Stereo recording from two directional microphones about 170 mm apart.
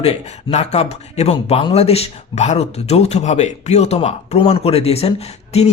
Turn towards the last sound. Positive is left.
turn(degrees=40)  # may be behind; listen again after turning